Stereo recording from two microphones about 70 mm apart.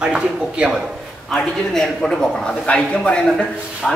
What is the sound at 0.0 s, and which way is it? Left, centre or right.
Speech, centre.